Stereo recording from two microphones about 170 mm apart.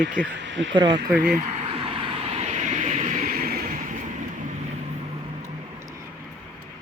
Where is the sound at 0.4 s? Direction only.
90° right.